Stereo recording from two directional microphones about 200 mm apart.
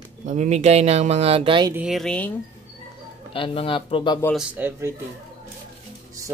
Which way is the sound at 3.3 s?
25° left (ahead or behind).